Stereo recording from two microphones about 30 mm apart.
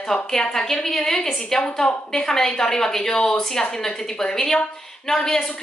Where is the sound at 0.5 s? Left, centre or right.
Centre.